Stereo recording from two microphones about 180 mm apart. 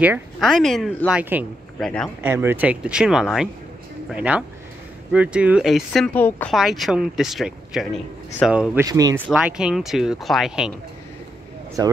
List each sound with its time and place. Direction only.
0.0 s speech: 10° right (ahead or behind)
0.5 s speech: centre (ahead or behind)
6.2 s speech: 10° left (ahead or behind)
6.5 s speech: centre (ahead or behind)
8.8 s speech: 20° right (ahead or behind)
9.3 s speech: 5° right (ahead or behind)
11.8 s speech: 20° right (ahead or behind)